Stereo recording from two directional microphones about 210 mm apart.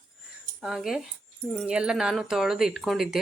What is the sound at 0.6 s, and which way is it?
Speech, centre (ahead or behind).